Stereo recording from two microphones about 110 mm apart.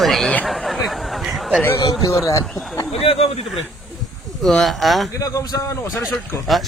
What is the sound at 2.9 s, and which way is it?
Speech, 60° left (ahead or behind).